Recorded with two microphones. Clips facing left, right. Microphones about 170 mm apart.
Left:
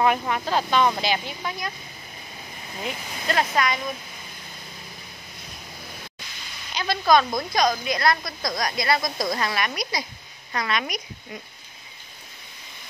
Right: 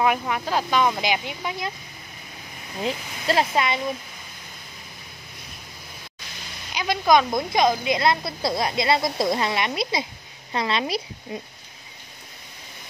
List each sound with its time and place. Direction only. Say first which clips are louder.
0.0 s speech: even; 5° right (ahead or behind)
2.8 s a woman's voice: right 4 dB; 30° right (ahead or behind)
6.7 s a woman's voice: right 1 dB; 15° right (ahead or behind)